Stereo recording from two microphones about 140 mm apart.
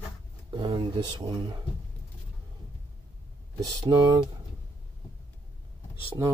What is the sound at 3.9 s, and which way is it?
Speech, 25° right (ahead or behind).